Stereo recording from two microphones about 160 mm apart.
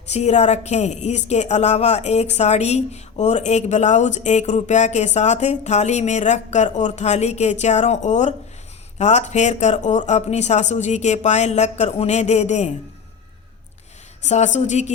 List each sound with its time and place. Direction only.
0.1 s a woman's voice: 45° left (ahead or behind)
14.3 s a woman's voice: 45° left (ahead or behind)